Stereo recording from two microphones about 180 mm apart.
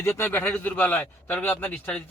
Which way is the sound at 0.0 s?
10° left (ahead or behind).